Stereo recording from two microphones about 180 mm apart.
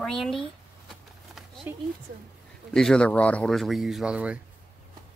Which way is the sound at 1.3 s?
Centre (ahead or behind).